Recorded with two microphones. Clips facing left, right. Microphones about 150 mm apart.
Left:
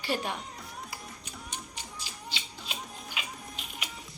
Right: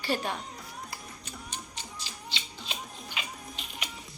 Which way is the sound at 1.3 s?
10° left (ahead or behind).